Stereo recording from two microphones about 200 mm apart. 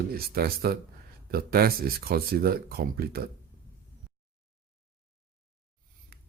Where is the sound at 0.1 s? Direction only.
50° right (ahead or behind).